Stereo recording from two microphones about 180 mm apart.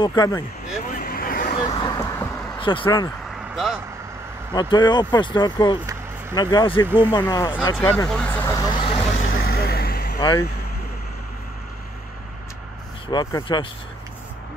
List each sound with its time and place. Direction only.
0.0 s speech: 25° left (ahead or behind)
0.8 s vehicle: 55° left (ahead or behind)
1.8 s vehicle: 20° left (ahead or behind)
2.6 s speech: 30° left (ahead or behind)
3.5 s speech: centre (ahead or behind)
4.6 s speech: 25° left (ahead or behind)
8.1 s vehicle: 10° left (ahead or behind); by 9.1 s 30° left (ahead or behind)
9.2 s vehicle: 60° left (ahead or behind)
10.1 s speech: 20° left (ahead or behind)
13.1 s speech: 25° left (ahead or behind)